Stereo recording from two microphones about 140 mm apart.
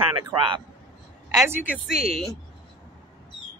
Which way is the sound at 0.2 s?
35° right (ahead or behind).